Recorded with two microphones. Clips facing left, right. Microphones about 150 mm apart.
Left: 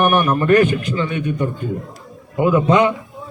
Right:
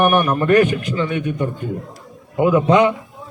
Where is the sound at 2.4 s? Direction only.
20° right (ahead or behind).